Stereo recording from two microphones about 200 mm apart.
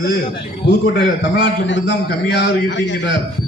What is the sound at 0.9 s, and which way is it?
A man's voice, 65° left (ahead or behind).